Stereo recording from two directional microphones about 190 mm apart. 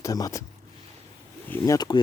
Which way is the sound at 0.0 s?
20° left (ahead or behind).